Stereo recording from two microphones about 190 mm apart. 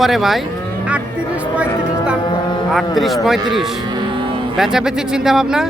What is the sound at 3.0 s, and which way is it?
Speech, centre (ahead or behind).